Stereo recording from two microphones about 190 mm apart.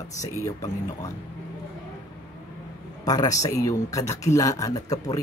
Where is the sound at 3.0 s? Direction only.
20° left (ahead or behind).